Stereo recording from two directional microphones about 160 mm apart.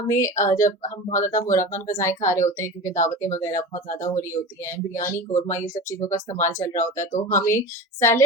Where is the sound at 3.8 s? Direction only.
50° left (ahead or behind).